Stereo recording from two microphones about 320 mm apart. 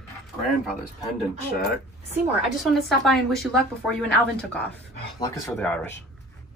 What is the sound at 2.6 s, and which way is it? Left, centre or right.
A woman's voice, centre.